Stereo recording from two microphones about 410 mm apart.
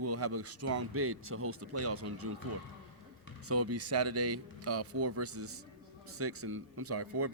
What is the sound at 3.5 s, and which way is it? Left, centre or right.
Speech, right.